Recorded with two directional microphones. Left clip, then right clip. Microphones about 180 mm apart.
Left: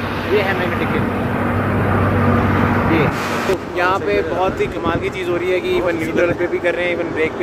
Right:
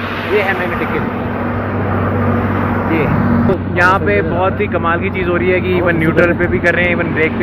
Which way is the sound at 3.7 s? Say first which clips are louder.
Right 7 dB; 10° left (ahead or behind).